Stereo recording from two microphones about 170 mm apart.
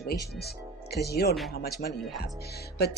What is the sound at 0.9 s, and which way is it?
A woman's voice, 70° left (ahead or behind).